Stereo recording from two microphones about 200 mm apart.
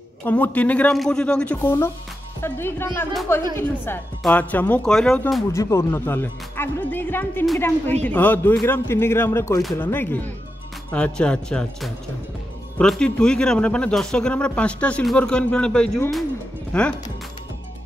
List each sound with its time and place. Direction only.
0.2 s speech: 10° left (ahead or behind)
5.5 s speech: 15° left (ahead or behind)
9.6 s a man's voice: centre (ahead or behind)